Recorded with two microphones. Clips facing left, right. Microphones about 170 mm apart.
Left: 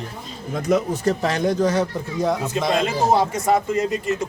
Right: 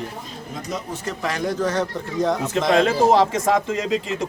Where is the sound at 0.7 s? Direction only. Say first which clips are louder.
Left 11 dB; 55° left (ahead or behind).